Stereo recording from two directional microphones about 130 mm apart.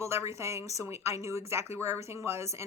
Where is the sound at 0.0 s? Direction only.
20° right (ahead or behind).